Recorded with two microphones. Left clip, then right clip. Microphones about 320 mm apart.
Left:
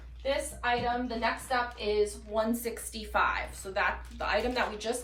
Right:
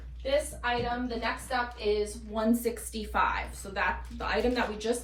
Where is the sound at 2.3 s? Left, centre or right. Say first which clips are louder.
Right 3 dB; centre.